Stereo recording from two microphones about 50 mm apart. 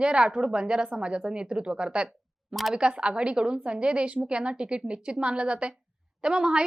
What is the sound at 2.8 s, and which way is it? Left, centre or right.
A woman's voice, centre.